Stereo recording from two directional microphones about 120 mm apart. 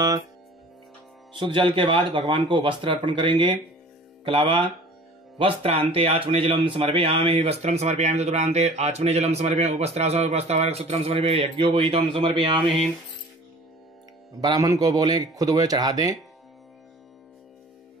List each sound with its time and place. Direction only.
1.3 s speech: 45° right (ahead or behind); by 11.5 s 60° right (ahead or behind)
11.5 s speech: 45° right (ahead or behind)
14.4 s a man's voice: 30° right (ahead or behind)